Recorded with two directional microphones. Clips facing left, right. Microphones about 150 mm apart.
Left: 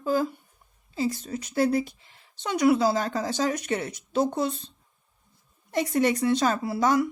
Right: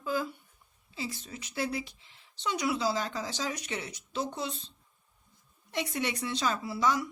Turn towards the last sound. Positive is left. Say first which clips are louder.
# left 6 dB
turn(degrees=50)  # may be behind; listen again after turning